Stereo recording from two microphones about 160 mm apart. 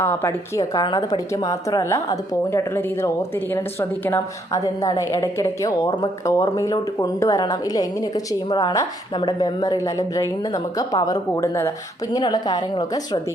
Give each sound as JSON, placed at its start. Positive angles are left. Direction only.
{"t": 0.0, "sound": "a woman's voice", "side_deg": 15}